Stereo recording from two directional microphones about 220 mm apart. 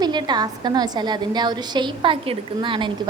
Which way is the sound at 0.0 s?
20° right (ahead or behind).